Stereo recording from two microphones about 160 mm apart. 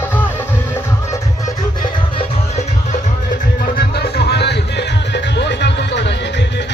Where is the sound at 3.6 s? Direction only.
85° left.